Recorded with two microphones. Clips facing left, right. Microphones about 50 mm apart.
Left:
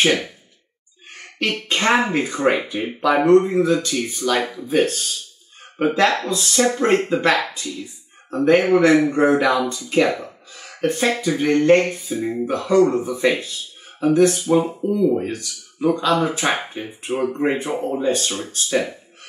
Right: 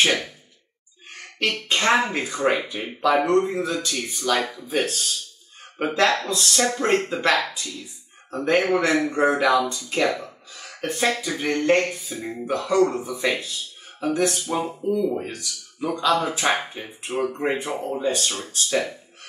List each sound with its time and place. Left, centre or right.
0.0 s speech: centre